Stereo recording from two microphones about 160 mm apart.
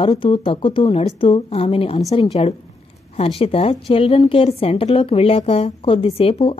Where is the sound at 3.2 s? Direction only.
35° left (ahead or behind).